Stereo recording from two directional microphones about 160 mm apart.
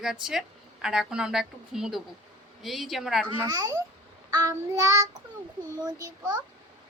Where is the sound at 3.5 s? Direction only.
20° right (ahead or behind).